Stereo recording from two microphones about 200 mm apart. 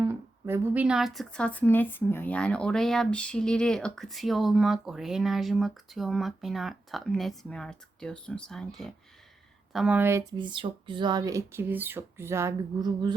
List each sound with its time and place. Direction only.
0.0 s speech: 10° right (ahead or behind)
10.3 s speech: 25° right (ahead or behind)